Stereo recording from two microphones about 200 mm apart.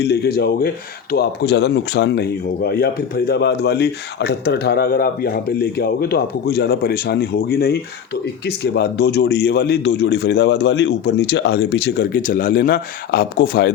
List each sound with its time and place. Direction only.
0.0 s a man's voice: 55° left (ahead or behind)